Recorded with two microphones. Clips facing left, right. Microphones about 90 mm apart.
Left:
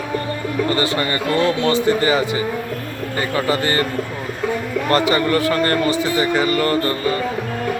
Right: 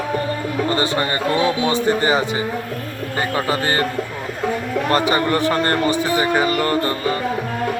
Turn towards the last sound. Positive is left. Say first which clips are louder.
# left 1 dB
turn(degrees=-20)  # may be behind; listen again after turning